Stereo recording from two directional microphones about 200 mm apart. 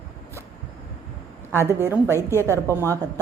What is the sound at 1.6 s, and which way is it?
Speech, 15° right (ahead or behind).